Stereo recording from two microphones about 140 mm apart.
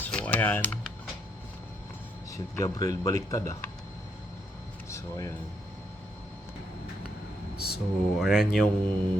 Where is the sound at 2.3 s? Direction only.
25° left (ahead or behind).